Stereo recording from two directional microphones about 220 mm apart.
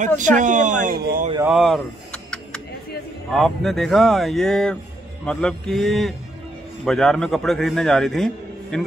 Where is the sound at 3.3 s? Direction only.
Centre (ahead or behind).